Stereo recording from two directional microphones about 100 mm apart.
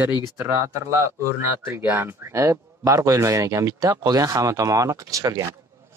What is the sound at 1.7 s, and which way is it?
Speech, 20° right (ahead or behind).